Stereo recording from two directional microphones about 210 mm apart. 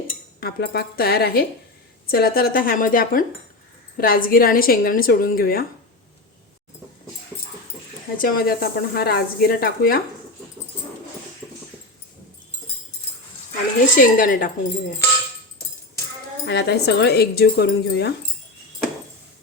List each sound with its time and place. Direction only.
0.3 s speech: 50° left (ahead or behind)
8.2 s speech: 45° left (ahead or behind)
13.9 s speech: 40° left (ahead or behind)
16.5 s speech: 50° left (ahead or behind)